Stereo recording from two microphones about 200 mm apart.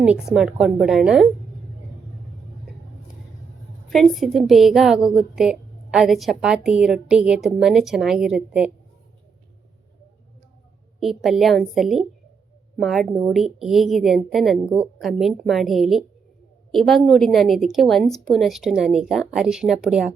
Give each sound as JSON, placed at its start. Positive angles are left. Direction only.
{"t": 0.0, "sound": "a woman's voice", "side_deg": -5}
{"t": 3.8, "sound": "a woman's voice", "side_deg": 0}
{"t": 11.0, "sound": "a woman's voice", "side_deg": 0}